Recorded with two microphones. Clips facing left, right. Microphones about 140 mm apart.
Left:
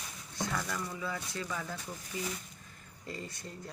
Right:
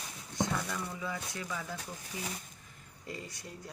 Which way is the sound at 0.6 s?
10° right (ahead or behind).